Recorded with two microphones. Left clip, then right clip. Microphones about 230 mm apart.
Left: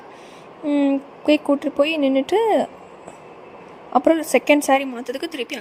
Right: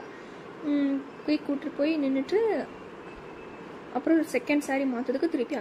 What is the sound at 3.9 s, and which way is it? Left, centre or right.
A woman's voice, left.